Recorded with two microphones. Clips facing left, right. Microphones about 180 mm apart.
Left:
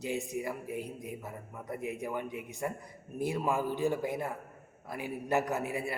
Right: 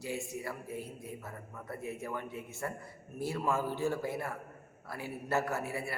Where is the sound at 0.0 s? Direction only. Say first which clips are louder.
Left 4 dB; 20° left (ahead or behind).